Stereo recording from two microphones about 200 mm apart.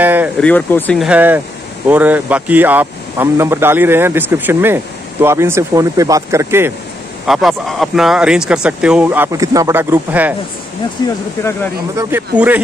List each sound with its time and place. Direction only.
0.0 s a sound: 10° right (ahead or behind)
0.4 s speech: 5° left (ahead or behind)
0.9 s speech: 5° right (ahead or behind)
7.2 s speech: centre (ahead or behind)
11.0 s speech: 20° left (ahead or behind)
12.0 s speech: 10° right (ahead or behind)